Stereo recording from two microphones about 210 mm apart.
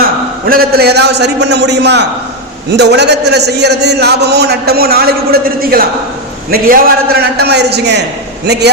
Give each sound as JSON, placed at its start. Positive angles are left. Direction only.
{"t": 0.4, "sound": "a man's voice", "side_deg": -45}